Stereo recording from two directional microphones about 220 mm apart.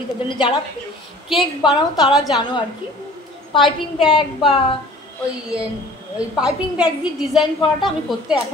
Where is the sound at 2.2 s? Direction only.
20° left (ahead or behind).